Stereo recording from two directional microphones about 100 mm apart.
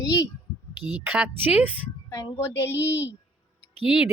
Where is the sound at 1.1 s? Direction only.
15° right (ahead or behind).